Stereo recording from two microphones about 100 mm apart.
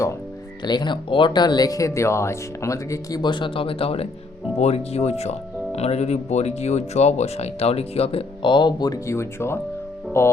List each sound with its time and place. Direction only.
0.6 s speech: 50° left (ahead or behind); by 3.2 s 30° left (ahead or behind)
3.2 s speech: 55° left (ahead or behind); by 4.1 s 75° left (ahead or behind)
4.6 s speech: 90° left
8.4 s speech: 50° left (ahead or behind)
9.0 s speech: 25° left (ahead or behind)